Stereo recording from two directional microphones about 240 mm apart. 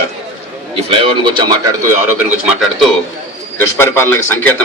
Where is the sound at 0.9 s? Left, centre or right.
Centre.